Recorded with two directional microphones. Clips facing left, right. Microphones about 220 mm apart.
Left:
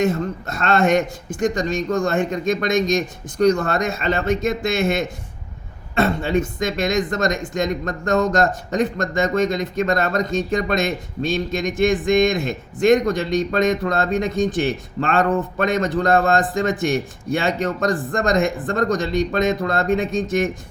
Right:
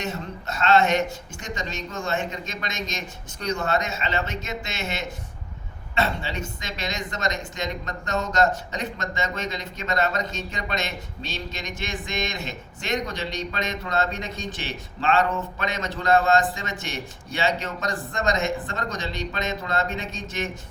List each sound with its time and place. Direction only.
0.0 s speech: 50° left (ahead or behind)